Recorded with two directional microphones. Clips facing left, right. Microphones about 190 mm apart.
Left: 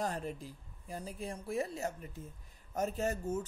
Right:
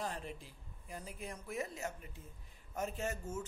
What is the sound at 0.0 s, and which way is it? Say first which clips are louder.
Speech: left 5 dB; 40° left (ahead or behind).